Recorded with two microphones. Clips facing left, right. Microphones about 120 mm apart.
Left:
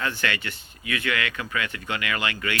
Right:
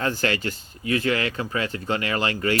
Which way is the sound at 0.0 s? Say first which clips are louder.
Right 4 dB; 40° right (ahead or behind).